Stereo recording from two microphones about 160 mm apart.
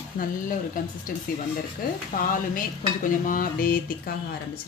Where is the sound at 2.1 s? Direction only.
55° left (ahead or behind).